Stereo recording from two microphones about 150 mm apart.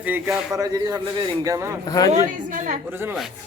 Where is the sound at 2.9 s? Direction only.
15° right (ahead or behind).